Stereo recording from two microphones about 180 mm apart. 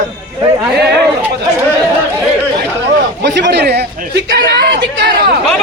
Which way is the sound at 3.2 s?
70° right (ahead or behind).